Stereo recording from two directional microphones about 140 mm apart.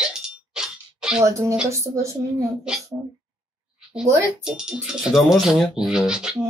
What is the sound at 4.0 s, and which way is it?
Speech, 5° right (ahead or behind).